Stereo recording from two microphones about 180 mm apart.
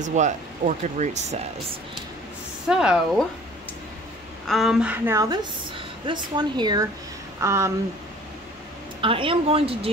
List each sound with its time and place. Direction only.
0.0 s speech: 40° right (ahead or behind)
2.7 s speech: 5° right (ahead or behind)
4.5 s a woman's voice: centre (ahead or behind)
9.0 s speech: 30° right (ahead or behind)